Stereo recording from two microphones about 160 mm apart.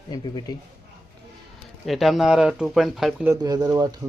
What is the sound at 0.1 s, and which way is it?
Speech, 25° left (ahead or behind).